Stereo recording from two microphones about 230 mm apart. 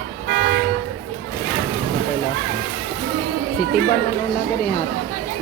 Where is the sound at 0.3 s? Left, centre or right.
Right.